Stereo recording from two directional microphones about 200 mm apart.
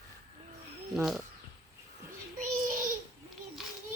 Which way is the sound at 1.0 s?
Centre (ahead or behind).